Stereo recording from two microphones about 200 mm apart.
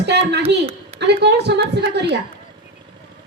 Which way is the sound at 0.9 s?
60° right (ahead or behind).